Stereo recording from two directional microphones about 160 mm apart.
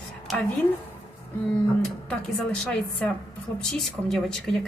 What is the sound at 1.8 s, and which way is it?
Speech, 5° left (ahead or behind).